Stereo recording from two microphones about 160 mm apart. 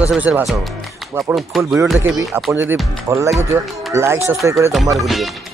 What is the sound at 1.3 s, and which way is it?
Speech, 10° right (ahead or behind).